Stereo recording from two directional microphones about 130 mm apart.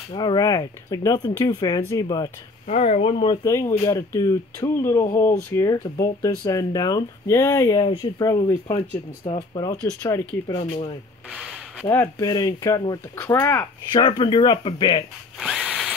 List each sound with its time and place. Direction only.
0.1 s speech: 35° left (ahead or behind)
2.6 s speech: 60° left (ahead or behind); by 3.3 s 45° left (ahead or behind)
3.3 s speech: 25° left (ahead or behind)
8.7 s speech: 45° left (ahead or behind)
9.6 s speech: 25° left (ahead or behind)
11.8 s speech: 15° left (ahead or behind)
12.3 s speech: 30° left (ahead or behind)
13.9 s speech: 35° left (ahead or behind)
15.3 s drill: centre (ahead or behind)